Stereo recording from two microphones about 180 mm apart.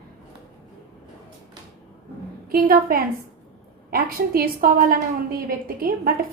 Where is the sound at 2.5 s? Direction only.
55° right (ahead or behind).